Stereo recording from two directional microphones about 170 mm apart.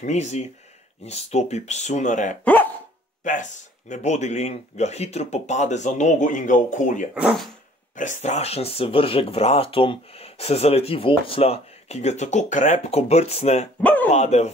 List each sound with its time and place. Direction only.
0.0 s speech: 40° left (ahead or behind)
2.4 s speech: 10° left (ahead or behind)
3.3 s speech: 50° left (ahead or behind)
7.2 s speech: 5° right (ahead or behind)
7.9 s speech: 45° left (ahead or behind)
13.7 s speech: 10° left (ahead or behind)
14.1 s speech: 40° left (ahead or behind)